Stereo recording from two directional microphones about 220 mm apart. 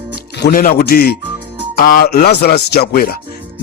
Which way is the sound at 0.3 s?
45° left (ahead or behind).